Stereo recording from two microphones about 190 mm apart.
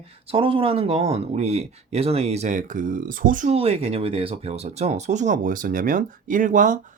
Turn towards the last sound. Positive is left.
turn(degrees=-45)  # may be behind; listen again after turning